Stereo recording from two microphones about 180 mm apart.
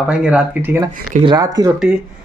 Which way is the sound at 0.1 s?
5° right (ahead or behind).